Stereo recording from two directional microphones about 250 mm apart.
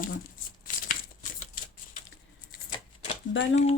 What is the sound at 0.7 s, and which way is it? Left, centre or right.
Tearing, left.